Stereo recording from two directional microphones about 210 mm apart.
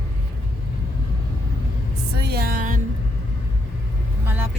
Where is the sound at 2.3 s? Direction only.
45° right (ahead or behind).